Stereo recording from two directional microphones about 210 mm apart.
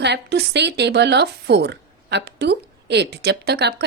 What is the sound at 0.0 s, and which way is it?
Speech, 55° right (ahead or behind).